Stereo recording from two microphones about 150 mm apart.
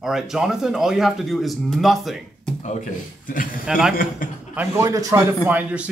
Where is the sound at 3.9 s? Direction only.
70° left (ahead or behind).